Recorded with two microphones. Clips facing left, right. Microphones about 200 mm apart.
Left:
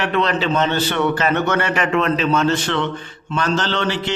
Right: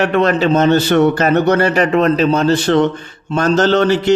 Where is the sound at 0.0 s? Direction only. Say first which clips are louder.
Right 6 dB; 50° right (ahead or behind).